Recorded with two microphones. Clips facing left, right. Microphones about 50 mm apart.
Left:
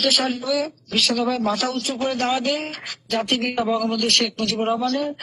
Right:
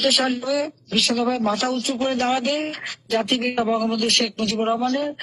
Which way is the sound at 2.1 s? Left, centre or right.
Right.